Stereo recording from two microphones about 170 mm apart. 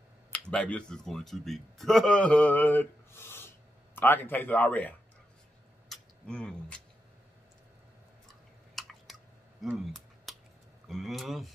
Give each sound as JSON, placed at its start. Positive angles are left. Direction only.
{"t": 0.3, "sound": "speech", "side_deg": 5}
{"t": 5.9, "sound": "tick-tock", "side_deg": 5}
{"t": 8.8, "sound": "chewing", "side_deg": 0}
{"t": 9.6, "sound": "a sound", "side_deg": 0}
{"t": 10.9, "sound": "speech", "side_deg": 0}